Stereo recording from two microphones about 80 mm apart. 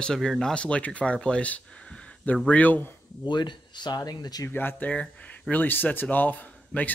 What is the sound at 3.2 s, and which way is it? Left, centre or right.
Speech, left.